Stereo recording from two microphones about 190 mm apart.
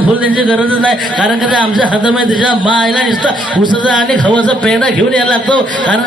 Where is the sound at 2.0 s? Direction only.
25° left (ahead or behind).